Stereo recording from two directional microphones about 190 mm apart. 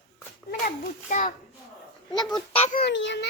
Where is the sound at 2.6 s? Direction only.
40° left (ahead or behind).